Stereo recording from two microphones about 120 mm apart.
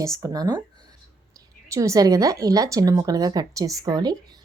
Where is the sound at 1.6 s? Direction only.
25° right (ahead or behind).